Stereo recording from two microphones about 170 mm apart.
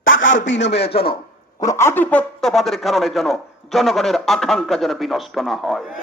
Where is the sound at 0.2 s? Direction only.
90° left.